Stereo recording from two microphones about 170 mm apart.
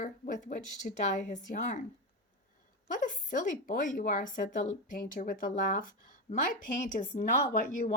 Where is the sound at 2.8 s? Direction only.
50° left (ahead or behind).